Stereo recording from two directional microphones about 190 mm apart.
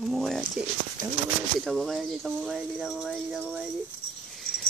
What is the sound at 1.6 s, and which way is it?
Speech, 5° left (ahead or behind).